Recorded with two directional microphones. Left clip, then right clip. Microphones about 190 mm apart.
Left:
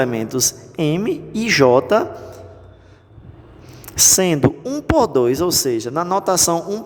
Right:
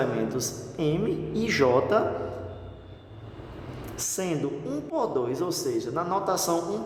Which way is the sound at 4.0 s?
45° left (ahead or behind).